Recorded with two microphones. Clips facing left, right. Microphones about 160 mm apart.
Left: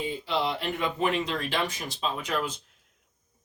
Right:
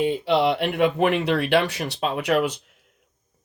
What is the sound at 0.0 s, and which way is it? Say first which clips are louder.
Speech: right 9 dB; 70° right (ahead or behind).